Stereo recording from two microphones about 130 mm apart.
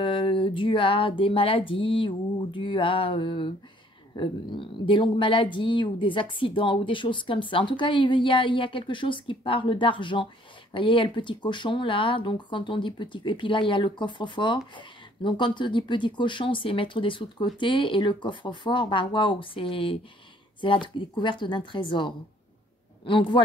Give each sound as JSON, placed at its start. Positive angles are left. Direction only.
{"t": 0.0, "sound": "speech", "side_deg": 40}